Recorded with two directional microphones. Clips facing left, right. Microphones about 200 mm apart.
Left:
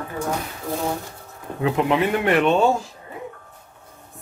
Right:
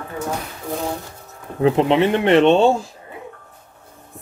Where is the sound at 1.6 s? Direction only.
30° right (ahead or behind).